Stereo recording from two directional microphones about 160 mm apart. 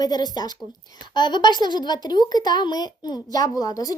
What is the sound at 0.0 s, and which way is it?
A woman's voice, 25° left (ahead or behind).